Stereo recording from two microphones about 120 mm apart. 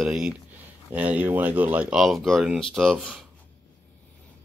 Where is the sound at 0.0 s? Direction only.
5° right (ahead or behind).